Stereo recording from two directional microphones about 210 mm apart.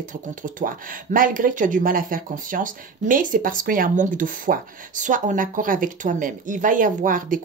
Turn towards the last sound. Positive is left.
turn(degrees=-40)  # may be behind; listen again after turning